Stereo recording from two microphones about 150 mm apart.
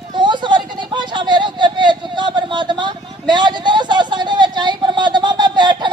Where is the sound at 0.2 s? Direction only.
30° right (ahead or behind).